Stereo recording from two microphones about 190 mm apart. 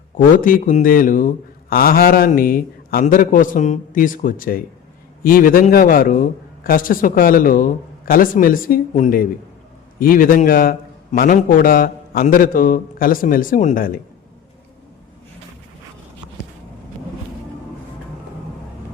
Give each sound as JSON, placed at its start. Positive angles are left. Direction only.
{"t": 0.1, "sound": "a man's voice", "side_deg": 45}